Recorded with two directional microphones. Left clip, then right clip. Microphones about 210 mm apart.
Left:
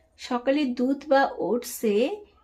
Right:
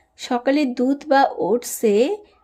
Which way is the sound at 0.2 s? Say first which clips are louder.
Right 5 dB; 20° right (ahead or behind).